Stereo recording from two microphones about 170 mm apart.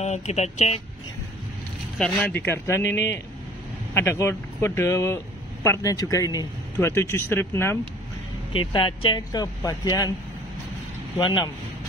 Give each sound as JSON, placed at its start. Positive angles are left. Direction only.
{"t": 0.0, "sound": "speech", "side_deg": 40}
{"t": 2.0, "sound": "speech", "side_deg": 5}
{"t": 8.5, "sound": "speech", "side_deg": 30}
{"t": 11.1, "sound": "speech", "side_deg": 30}